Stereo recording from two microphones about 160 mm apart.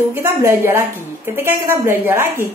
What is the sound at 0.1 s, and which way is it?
A woman's voice, 15° right (ahead or behind).